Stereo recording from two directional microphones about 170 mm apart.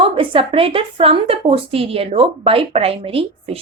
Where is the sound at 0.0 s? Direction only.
30° right (ahead or behind).